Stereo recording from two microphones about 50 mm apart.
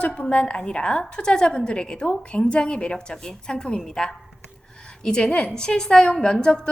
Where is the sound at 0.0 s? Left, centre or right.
Left.